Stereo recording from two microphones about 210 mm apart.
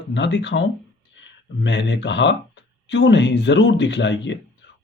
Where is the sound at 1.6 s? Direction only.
60° left (ahead or behind).